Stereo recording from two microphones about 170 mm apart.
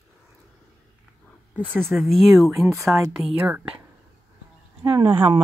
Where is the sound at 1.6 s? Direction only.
5° left (ahead or behind).